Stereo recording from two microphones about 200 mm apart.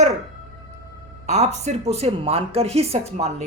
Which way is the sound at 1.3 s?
35° right (ahead or behind).